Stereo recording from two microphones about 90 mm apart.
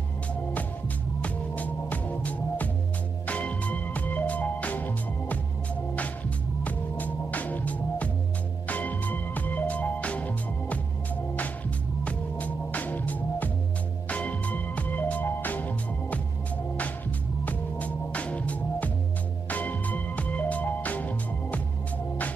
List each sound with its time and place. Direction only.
1.2 s music: 15° left (ahead or behind)
6.6 s music: 15° left (ahead or behind)
12.0 s music: 15° left (ahead or behind)
17.5 s music: 15° left (ahead or behind)